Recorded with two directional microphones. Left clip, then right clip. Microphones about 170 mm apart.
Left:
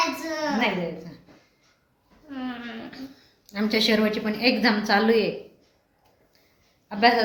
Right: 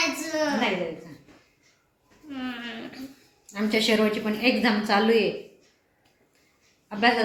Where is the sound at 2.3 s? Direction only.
30° left (ahead or behind).